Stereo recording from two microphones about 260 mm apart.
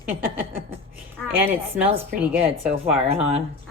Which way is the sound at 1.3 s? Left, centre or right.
Centre.